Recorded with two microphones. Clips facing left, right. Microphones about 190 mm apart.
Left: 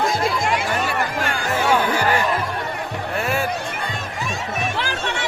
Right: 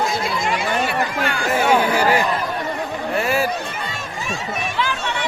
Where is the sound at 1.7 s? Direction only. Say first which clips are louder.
Right 2 dB; 10° right (ahead or behind).